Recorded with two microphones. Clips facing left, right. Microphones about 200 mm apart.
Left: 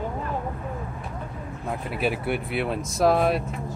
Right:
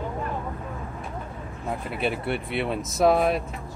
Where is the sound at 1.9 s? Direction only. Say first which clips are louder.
Left 2 dB; 5° left (ahead or behind).